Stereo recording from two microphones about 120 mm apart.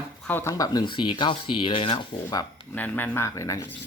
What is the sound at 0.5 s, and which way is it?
Speech, 30° left (ahead or behind).